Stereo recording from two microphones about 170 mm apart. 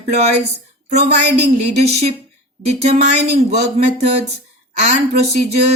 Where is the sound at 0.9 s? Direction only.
80° right.